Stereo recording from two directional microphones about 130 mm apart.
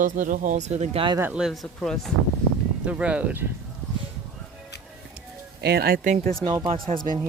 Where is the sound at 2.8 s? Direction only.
10° right (ahead or behind).